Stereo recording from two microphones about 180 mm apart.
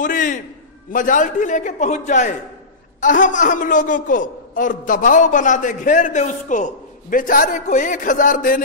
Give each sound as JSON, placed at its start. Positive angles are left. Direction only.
{"t": 0.0, "sound": "a man's voice", "side_deg": 45}